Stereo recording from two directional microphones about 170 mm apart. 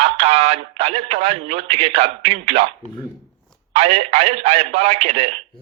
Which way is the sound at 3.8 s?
35° right (ahead or behind).